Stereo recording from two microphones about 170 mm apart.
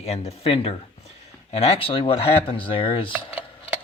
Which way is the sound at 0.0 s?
40° left (ahead or behind).